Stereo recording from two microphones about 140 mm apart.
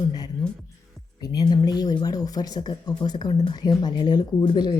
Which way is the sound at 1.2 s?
25° left (ahead or behind).